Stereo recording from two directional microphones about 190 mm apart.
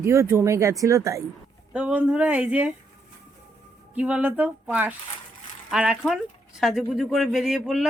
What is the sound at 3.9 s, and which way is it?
Speech, 5° right (ahead or behind).